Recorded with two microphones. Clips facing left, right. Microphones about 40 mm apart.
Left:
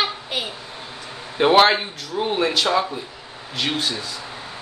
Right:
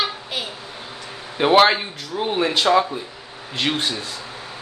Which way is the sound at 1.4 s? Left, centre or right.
Centre.